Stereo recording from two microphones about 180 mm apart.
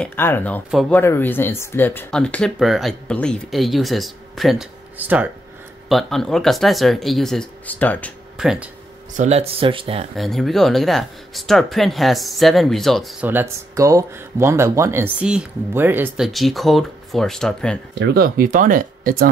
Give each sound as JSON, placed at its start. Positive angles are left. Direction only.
{"t": 0.0, "sound": "speech", "side_deg": 10}
{"t": 5.9, "sound": "speech", "side_deg": 0}
{"t": 8.4, "sound": "speech", "side_deg": 0}
{"t": 9.1, "sound": "speech", "side_deg": -40}
{"t": 10.1, "sound": "speech", "side_deg": 0}
{"t": 13.3, "sound": "speech", "side_deg": -15}
{"t": 16.3, "sound": "speech", "side_deg": 0}
{"t": 17.9, "sound": "speech", "side_deg": -65}